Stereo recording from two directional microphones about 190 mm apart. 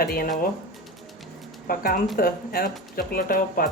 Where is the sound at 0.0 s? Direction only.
50° left (ahead or behind).